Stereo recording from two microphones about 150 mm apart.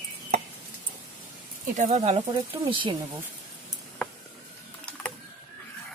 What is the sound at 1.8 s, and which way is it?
Speech, 50° right (ahead or behind).